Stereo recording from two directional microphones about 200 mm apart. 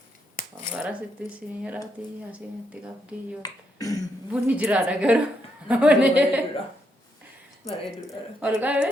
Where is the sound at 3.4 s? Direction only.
15° left (ahead or behind).